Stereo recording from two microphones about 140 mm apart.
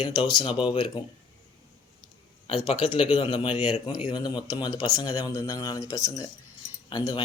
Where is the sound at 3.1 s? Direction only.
30° left (ahead or behind).